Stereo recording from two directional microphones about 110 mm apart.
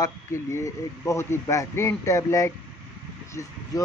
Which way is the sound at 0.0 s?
25° left (ahead or behind).